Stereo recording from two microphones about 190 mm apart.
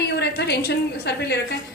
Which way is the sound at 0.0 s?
60° left (ahead or behind).